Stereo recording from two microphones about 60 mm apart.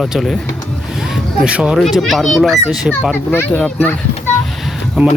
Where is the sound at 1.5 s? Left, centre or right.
Centre.